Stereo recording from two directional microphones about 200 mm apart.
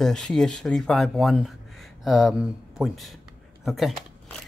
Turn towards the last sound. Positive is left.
turn(degrees=0)  # may be behind; listen again after turning